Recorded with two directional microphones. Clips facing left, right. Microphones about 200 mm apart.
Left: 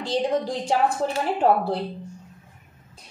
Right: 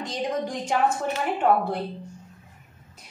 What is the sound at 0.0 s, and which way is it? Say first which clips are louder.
A woman's voice: left 4 dB; 30° left (ahead or behind).